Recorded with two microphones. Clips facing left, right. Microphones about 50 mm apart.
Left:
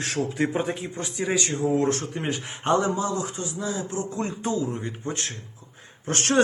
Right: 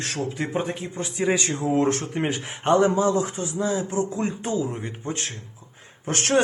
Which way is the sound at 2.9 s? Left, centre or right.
Right.